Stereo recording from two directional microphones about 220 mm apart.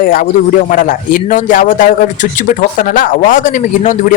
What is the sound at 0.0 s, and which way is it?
Speech, 40° left (ahead or behind).